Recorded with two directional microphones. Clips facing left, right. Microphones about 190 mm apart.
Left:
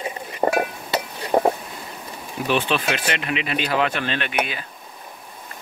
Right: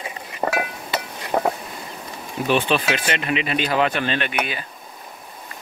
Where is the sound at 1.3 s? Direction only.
20° left (ahead or behind).